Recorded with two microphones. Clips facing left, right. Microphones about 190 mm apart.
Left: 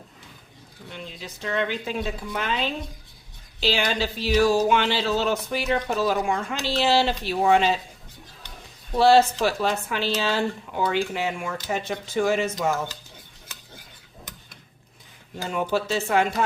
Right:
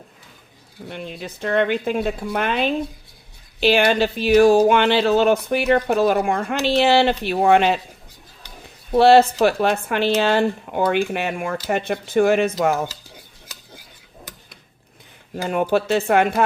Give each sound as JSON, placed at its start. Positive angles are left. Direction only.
{"t": 0.9, "sound": "speech", "side_deg": -60}
{"t": 8.9, "sound": "speech", "side_deg": -60}
{"t": 15.4, "sound": "speech", "side_deg": -60}